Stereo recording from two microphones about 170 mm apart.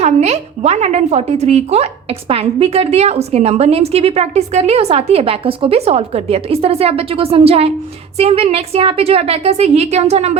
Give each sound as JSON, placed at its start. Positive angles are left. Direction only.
{"t": 0.0, "sound": "speech", "side_deg": -40}